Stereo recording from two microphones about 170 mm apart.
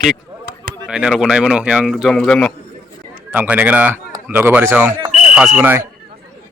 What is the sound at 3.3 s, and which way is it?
Speech, 10° right (ahead or behind).